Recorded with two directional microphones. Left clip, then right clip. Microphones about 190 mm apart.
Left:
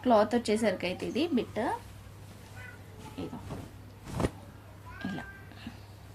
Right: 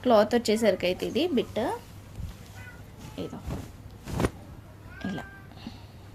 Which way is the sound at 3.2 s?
40° right (ahead or behind).